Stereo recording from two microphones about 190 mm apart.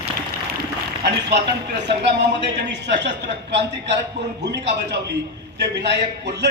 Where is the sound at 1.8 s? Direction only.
65° right (ahead or behind).